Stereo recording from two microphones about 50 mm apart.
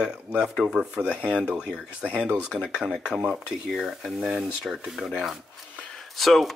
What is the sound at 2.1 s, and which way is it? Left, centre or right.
Speech, right.